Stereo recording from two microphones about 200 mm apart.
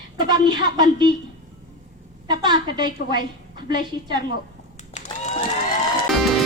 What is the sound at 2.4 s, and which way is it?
Speech, 20° right (ahead or behind).